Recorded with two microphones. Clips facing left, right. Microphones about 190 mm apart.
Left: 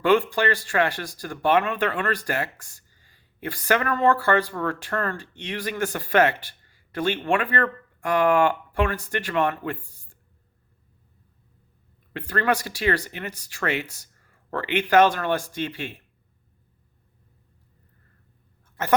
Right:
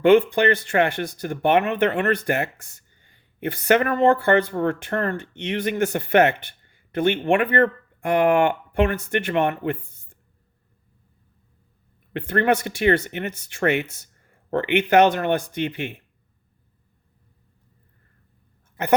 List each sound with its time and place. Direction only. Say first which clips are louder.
0.0 s speech: right 5 dB; 20° right (ahead or behind)
12.1 s speech: right 4 dB; 25° right (ahead or behind)